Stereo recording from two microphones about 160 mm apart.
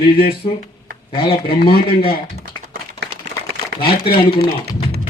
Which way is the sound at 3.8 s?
70° left (ahead or behind).